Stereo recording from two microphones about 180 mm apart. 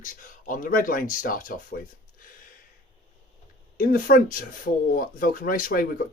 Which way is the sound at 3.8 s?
50° left (ahead or behind).